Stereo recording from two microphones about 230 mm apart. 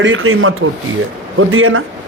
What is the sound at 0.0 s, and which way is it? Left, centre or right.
A man's voice, right.